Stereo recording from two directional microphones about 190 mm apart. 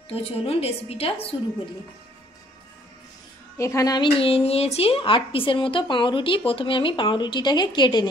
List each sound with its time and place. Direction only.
0.1 s a woman's voice: 30° left (ahead or behind)
3.5 s speech: 15° left (ahead or behind)